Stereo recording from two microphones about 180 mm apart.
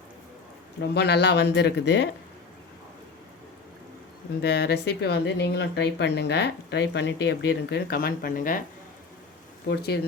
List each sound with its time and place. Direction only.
0.8 s speech: 70° left (ahead or behind)
4.4 s speech: 65° left (ahead or behind)
9.6 s speech: 65° left (ahead or behind)